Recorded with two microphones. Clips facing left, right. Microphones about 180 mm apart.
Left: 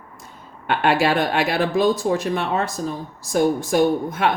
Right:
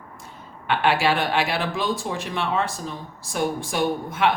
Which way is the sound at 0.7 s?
45° left (ahead or behind).